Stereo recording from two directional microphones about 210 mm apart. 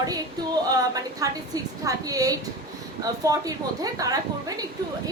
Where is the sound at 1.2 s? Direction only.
15° right (ahead or behind).